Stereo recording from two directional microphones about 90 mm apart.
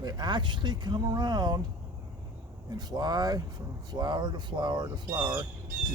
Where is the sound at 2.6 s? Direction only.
45° right (ahead or behind).